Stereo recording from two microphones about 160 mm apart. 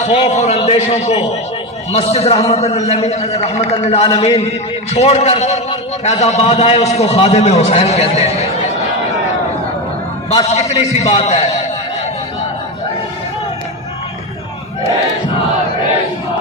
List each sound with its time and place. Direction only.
0.0 s a man's voice: 40° left (ahead or behind)
10.5 s a man's voice: 40° left (ahead or behind)